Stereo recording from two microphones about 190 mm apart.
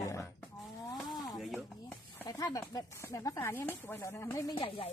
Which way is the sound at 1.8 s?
15° left (ahead or behind).